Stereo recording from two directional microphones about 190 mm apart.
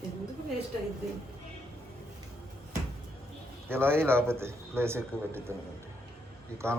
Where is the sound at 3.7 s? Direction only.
10° right (ahead or behind).